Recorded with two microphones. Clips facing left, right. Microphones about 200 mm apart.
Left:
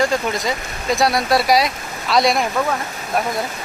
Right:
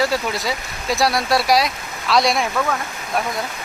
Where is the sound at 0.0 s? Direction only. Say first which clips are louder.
Left 2 dB; 5° right (ahead or behind).